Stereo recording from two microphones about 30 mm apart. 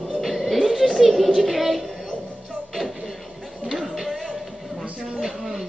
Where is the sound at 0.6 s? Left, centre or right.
Centre.